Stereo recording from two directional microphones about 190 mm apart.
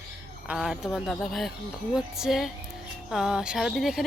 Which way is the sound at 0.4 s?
Centre (ahead or behind).